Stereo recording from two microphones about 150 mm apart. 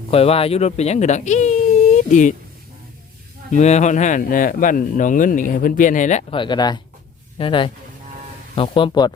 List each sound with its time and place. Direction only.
0.1 s speech: 40° left (ahead or behind)
3.5 s speech: 50° left (ahead or behind)
6.3 s speech: 30° left (ahead or behind)